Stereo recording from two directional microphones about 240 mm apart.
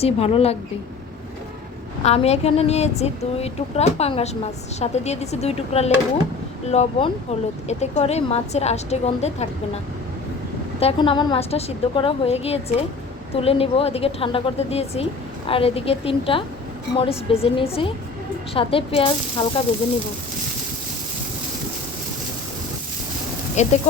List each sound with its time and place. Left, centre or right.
0.0 s a woman's voice: left
2.0 s a woman's voice: left
10.8 s a woman's voice: left
23.6 s a woman's voice: left